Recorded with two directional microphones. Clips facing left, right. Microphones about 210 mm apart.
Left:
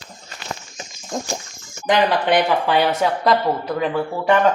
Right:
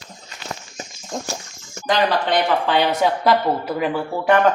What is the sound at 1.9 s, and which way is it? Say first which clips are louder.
Speech: left 2 dB; 15° left (ahead or behind).